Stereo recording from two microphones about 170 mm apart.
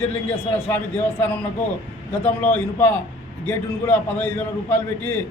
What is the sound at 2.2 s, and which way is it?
A man's voice, 10° left (ahead or behind).